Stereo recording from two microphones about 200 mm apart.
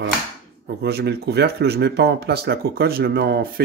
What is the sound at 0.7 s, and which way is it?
Speech, 55° right (ahead or behind).